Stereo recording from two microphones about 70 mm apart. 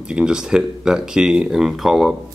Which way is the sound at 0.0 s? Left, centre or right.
Centre.